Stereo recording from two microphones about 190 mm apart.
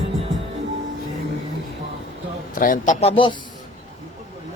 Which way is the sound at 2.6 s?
45° left (ahead or behind).